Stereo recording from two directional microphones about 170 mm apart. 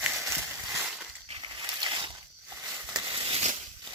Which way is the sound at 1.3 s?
25° right (ahead or behind).